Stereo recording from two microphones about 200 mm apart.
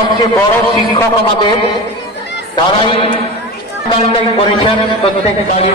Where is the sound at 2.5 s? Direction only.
25° left (ahead or behind).